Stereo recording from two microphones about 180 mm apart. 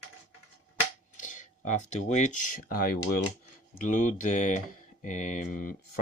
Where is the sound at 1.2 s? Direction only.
45° left (ahead or behind); by 3.2 s 60° left (ahead or behind).